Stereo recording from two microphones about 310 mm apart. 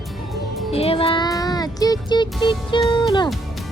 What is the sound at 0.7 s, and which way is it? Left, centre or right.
Music, centre.